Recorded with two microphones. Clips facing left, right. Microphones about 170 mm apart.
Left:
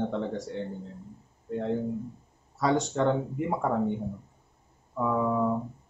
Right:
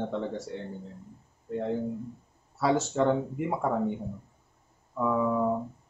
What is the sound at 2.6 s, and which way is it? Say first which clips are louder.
Speech: even; 5° right (ahead or behind).